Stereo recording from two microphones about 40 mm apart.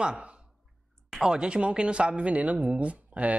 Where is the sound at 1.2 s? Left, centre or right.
Right.